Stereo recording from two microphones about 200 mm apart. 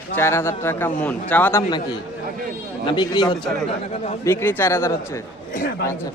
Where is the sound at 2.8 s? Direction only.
25° left (ahead or behind).